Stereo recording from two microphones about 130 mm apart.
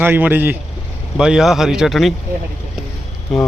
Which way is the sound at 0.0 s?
15° right (ahead or behind).